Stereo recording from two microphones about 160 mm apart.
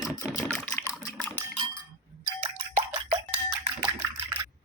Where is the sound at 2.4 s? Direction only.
35° right (ahead or behind).